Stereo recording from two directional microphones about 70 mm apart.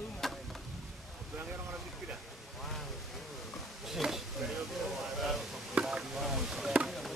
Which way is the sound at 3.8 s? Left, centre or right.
Centre.